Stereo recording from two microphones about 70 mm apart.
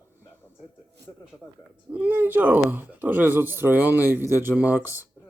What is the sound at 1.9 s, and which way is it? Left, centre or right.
Speech, right.